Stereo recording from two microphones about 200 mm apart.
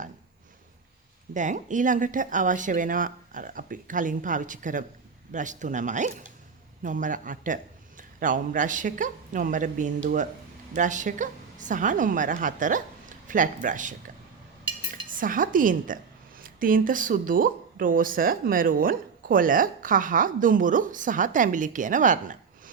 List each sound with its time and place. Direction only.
1.3 s a woman's voice: 40° right (ahead or behind)
15.2 s a woman's voice: 45° right (ahead or behind)